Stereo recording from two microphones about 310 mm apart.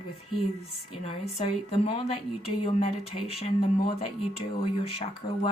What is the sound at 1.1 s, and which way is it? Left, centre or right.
A woman's voice, centre.